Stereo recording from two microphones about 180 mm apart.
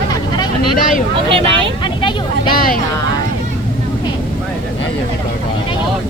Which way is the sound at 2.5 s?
55° left (ahead or behind).